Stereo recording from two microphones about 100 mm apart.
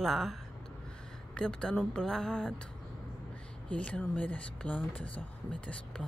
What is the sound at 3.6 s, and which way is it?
Speech, 10° left (ahead or behind).